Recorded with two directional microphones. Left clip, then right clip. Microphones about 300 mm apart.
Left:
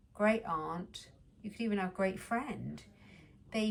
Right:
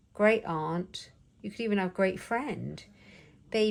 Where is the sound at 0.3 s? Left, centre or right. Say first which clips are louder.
Right 6 dB; centre.